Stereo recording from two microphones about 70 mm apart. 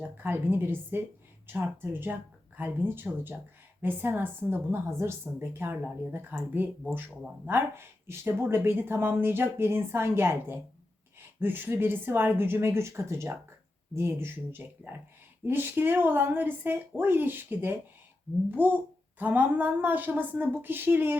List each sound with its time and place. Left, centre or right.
0.0 s speech: right